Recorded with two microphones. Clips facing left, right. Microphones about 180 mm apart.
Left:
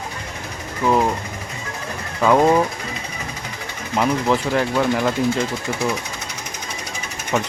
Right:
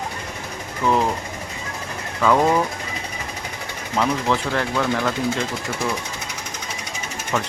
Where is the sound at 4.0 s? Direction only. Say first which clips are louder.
Left 2 dB; 10° left (ahead or behind).